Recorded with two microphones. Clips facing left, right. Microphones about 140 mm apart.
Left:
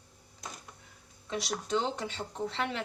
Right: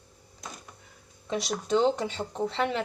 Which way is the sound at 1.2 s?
20° right (ahead or behind).